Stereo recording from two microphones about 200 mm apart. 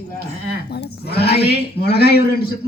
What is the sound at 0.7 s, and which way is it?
A man's voice, 55° left (ahead or behind).